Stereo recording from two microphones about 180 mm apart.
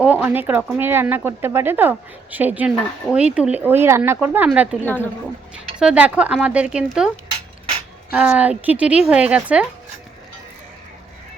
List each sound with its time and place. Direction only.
0.0 s speech: 10° right (ahead or behind)
8.1 s speech: 5° right (ahead or behind)